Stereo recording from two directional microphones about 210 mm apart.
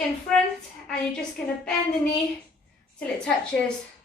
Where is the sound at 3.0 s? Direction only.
5° left (ahead or behind).